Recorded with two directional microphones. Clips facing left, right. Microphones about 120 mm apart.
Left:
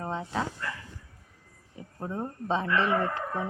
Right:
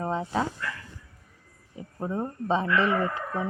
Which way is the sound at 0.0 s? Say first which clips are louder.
Right 4 dB; 5° right (ahead or behind).